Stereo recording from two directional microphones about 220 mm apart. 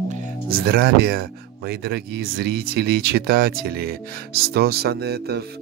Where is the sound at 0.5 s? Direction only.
45° right (ahead or behind).